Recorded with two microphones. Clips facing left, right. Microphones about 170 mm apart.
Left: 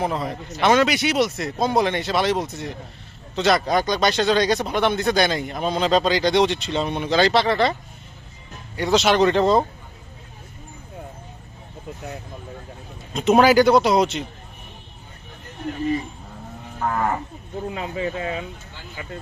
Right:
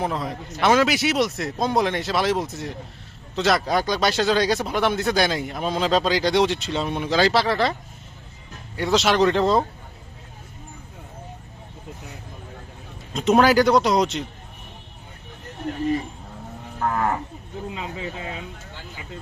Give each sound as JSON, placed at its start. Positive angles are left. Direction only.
{"t": 0.0, "sound": "speech", "side_deg": 0}
{"t": 13.1, "sound": "speech", "side_deg": 5}
{"t": 17.7, "sound": "speech", "side_deg": 60}